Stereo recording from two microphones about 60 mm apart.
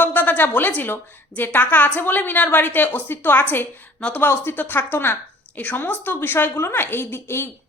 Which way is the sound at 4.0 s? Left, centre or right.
Centre.